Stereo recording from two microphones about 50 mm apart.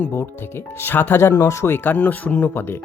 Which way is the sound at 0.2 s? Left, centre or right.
Left.